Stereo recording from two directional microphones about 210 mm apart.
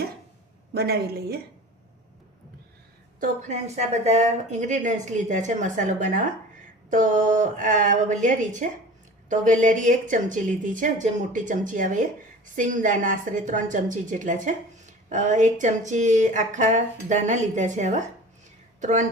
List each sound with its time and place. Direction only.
0.7 s a man's voice: 50° right (ahead or behind)
3.2 s a woman's voice: 35° right (ahead or behind)